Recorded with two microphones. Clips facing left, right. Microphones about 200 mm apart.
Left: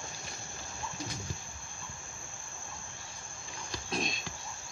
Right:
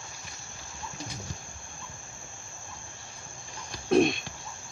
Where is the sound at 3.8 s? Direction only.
60° right (ahead or behind).